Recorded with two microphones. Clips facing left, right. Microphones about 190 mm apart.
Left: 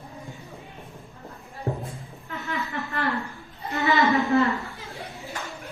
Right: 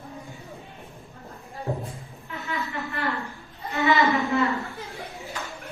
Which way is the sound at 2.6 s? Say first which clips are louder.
Left 2 dB; centre (ahead or behind).